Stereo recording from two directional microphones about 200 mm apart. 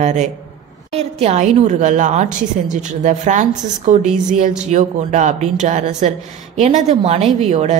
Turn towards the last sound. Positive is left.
turn(degrees=-35)  # may be behind; listen again after turning